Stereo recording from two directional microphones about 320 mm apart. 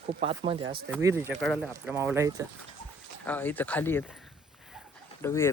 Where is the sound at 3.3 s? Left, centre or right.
Centre.